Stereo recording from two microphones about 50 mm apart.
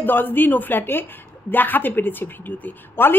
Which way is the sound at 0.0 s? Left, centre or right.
Left.